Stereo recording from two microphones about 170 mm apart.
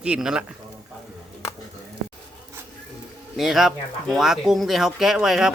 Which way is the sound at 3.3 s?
Centre (ahead or behind).